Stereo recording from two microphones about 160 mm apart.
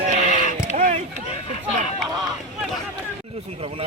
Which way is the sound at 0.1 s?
50° right (ahead or behind).